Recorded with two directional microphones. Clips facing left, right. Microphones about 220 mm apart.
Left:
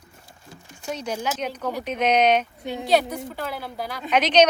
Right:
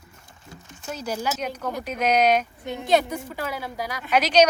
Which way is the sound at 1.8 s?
10° right (ahead or behind).